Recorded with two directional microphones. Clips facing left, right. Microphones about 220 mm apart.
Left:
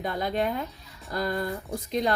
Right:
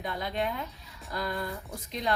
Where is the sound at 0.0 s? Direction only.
45° left (ahead or behind).